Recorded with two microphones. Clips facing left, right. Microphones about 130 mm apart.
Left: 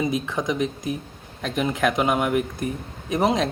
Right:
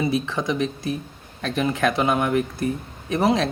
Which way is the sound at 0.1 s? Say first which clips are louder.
Right 1 dB; 15° left (ahead or behind).